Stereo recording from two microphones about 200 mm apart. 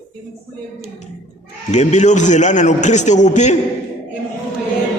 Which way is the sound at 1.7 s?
35° left (ahead or behind).